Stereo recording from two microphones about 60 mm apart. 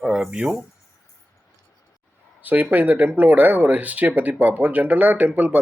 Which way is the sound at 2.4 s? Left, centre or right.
Right.